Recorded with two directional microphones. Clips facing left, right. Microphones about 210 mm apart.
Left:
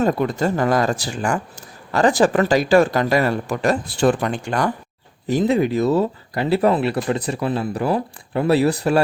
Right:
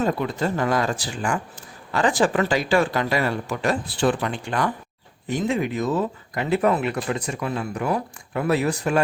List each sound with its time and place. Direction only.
0.0 s speech: 45° left (ahead or behind)